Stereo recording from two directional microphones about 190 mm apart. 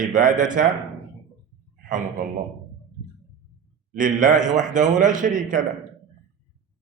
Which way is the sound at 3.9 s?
45° right (ahead or behind).